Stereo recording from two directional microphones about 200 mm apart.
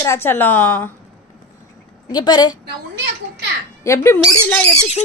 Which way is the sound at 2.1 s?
20° left (ahead or behind).